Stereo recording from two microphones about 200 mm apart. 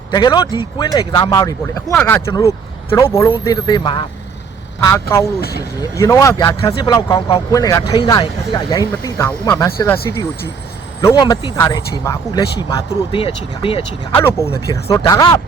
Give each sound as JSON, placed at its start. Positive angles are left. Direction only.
{"t": 0.1, "sound": "speech", "side_deg": 20}
{"t": 5.4, "sound": "speech", "side_deg": 50}
{"t": 5.9, "sound": "speech", "side_deg": 15}
{"t": 14.2, "sound": "speech", "side_deg": 10}